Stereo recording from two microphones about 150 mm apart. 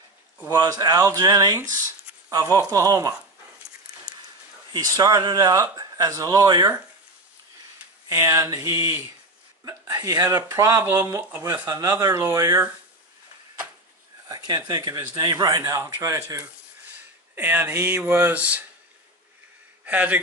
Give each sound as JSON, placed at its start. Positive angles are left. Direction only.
{"t": 0.5, "sound": "speech", "side_deg": -25}
{"t": 4.7, "sound": "speech", "side_deg": -25}
{"t": 8.1, "sound": "speech", "side_deg": -20}
{"t": 14.3, "sound": "speech", "side_deg": -25}
{"t": 19.8, "sound": "speech", "side_deg": -10}